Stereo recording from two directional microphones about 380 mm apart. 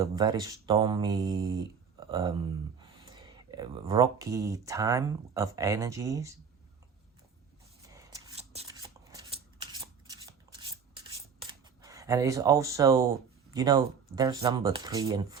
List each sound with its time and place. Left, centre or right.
0.0 s speech: centre
2.0 s a sound: centre
3.1 s speech: centre
7.9 s shuffling cards: centre
9.7 s a sound: centre
11.4 s camera: centre
13.5 s speech: centre